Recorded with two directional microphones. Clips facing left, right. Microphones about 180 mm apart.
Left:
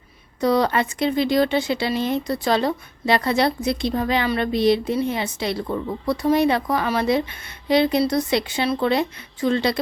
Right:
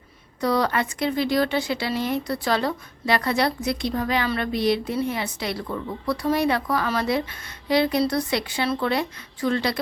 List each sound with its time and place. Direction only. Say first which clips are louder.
0.3 s speech: left 3 dB; 20° left (ahead or behind)